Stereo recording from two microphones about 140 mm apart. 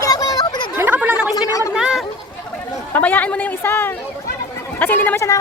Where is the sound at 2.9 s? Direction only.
15° left (ahead or behind).